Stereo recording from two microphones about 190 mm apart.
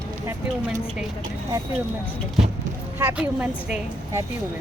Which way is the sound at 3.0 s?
10° right (ahead or behind).